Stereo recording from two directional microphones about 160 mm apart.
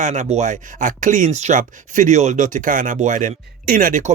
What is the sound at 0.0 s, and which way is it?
Speech, 45° right (ahead or behind).